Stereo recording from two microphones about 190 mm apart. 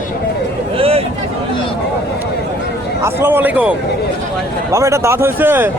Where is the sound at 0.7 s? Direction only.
30° right (ahead or behind).